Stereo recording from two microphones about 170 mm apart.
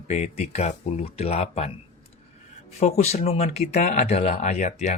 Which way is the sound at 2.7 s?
40° left (ahead or behind).